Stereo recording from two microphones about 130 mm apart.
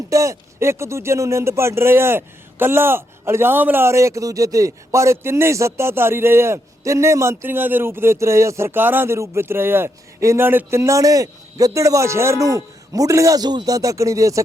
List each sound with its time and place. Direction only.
0.1 s speech: 25° right (ahead or behind)